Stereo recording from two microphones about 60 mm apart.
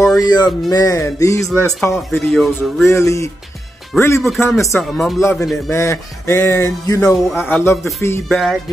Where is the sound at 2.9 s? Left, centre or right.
Left.